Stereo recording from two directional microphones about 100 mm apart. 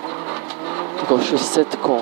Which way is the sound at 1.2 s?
15° right (ahead or behind).